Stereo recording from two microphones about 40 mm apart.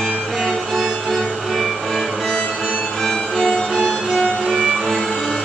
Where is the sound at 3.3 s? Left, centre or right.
Centre.